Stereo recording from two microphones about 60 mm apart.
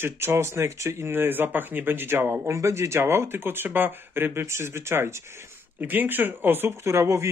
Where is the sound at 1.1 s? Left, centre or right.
Right.